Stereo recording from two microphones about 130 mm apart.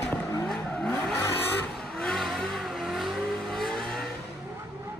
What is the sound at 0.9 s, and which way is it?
Vehicle, 20° left (ahead or behind).